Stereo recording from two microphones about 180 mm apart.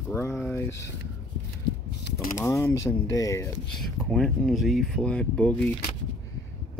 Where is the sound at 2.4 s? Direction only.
15° left (ahead or behind).